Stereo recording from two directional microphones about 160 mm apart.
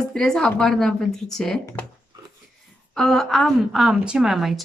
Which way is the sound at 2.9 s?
Centre (ahead or behind).